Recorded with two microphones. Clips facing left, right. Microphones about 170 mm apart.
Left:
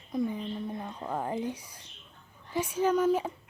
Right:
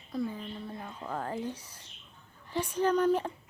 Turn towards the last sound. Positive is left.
turn(degrees=10)  # may be behind; listen again after turning